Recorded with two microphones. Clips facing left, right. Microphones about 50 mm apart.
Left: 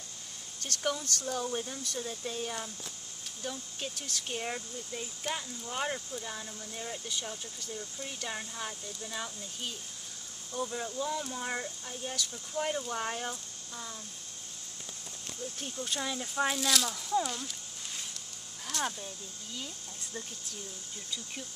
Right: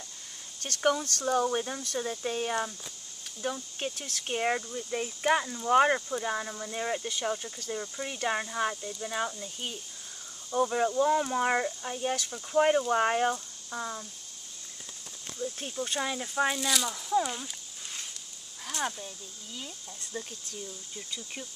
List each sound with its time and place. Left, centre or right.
0.6 s speech: right
15.8 s speech: right
16.4 s speech: centre
18.7 s speech: centre